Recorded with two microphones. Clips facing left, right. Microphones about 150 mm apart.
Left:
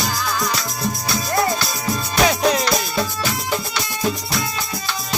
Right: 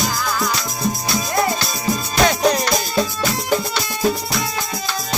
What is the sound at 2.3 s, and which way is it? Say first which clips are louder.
Music: right 1 dB; centre (ahead or behind).